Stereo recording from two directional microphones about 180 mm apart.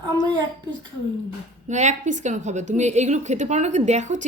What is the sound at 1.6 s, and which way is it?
A woman's voice, 40° right (ahead or behind).